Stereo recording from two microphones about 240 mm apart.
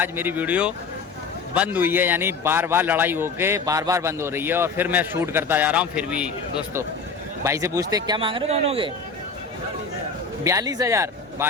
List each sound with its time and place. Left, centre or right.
0.0 s a man's voice: centre; by 8.9 s right
10.4 s a man's voice: centre